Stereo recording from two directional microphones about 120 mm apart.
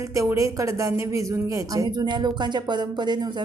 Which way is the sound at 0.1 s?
25° right (ahead or behind).